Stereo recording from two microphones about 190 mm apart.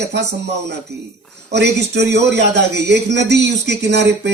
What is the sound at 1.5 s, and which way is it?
A man's voice, 65° right (ahead or behind).